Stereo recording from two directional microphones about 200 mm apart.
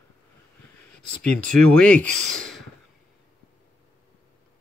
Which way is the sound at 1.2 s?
5° left (ahead or behind).